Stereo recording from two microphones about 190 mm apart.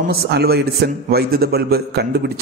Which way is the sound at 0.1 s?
55° right (ahead or behind).